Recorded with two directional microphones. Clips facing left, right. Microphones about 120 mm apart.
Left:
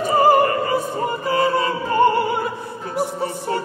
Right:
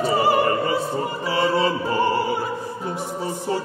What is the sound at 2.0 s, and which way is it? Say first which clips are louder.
Opera: left 7 dB; 55° left (ahead or behind).